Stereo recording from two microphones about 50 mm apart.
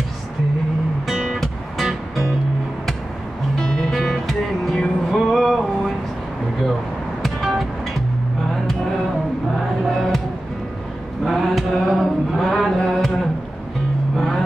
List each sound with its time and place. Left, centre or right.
1.1 s music: centre
1.4 s music: centre
3.5 s music: centre
7.2 s music: centre
9.8 s music: centre
11.2 s mantra: centre
14.1 s vehicle: centre